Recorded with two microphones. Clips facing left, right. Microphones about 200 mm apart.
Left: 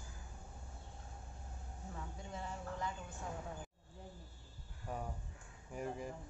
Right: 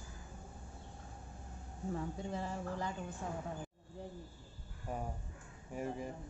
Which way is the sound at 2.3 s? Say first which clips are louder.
Right 2 dB; 35° right (ahead or behind).